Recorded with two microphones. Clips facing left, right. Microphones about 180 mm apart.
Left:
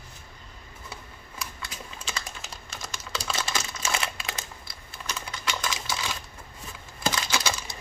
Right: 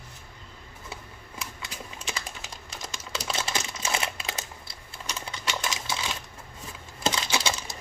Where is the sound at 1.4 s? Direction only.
20° right (ahead or behind).